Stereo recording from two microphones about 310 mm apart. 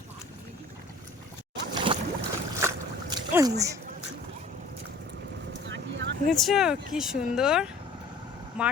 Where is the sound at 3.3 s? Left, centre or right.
Centre.